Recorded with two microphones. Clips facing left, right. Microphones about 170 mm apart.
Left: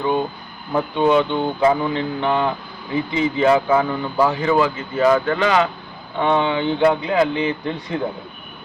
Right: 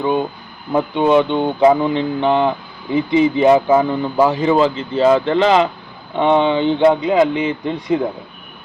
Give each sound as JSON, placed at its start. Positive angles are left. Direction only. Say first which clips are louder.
{"t": 0.7, "sound": "speech", "louder": "right 3 dB", "side_deg": -20}